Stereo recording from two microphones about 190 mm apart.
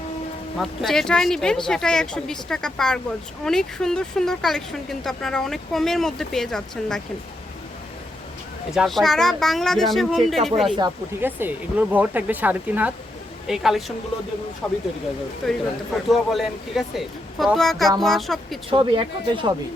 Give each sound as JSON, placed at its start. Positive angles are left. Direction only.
{"t": 0.6, "sound": "speech", "side_deg": 0}
{"t": 8.7, "sound": "speech", "side_deg": 0}
{"t": 10.8, "sound": "speech", "side_deg": -15}
{"t": 18.7, "sound": "speech", "side_deg": -25}